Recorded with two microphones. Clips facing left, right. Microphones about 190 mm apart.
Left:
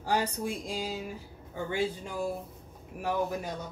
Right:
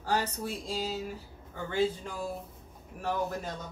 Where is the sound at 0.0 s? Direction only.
15° left (ahead or behind).